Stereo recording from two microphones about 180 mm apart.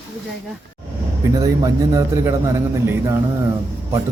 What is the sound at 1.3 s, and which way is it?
Speech, 20° right (ahead or behind).